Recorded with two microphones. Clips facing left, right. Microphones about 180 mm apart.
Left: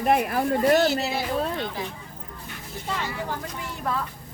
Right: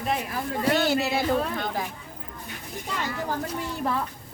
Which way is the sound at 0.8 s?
55° right (ahead or behind).